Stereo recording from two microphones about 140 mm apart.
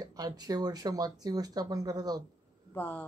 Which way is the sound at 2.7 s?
15° left (ahead or behind).